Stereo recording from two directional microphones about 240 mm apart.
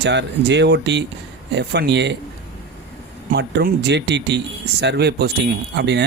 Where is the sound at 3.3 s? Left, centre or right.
Right.